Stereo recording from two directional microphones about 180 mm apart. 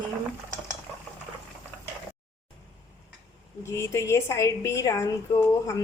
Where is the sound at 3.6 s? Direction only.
15° left (ahead or behind).